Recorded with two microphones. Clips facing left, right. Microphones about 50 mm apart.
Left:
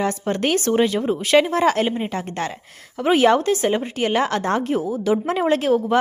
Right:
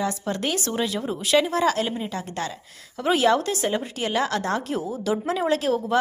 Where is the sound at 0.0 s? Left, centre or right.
Left.